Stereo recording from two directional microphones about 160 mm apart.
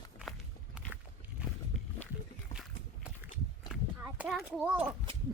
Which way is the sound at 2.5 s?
5° right (ahead or behind).